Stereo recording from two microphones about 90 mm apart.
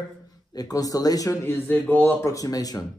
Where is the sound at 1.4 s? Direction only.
20° left (ahead or behind).